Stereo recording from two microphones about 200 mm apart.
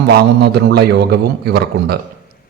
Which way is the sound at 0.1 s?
55° right (ahead or behind).